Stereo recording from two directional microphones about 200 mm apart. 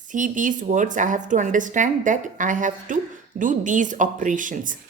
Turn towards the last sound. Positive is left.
turn(degrees=-40)  # may be behind; listen again after turning